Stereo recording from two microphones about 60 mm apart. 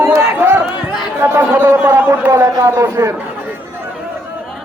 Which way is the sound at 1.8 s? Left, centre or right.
Right.